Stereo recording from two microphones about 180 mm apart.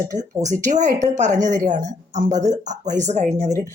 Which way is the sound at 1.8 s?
20° right (ahead or behind).